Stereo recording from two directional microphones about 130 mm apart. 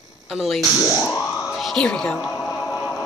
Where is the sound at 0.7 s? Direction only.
25° left (ahead or behind).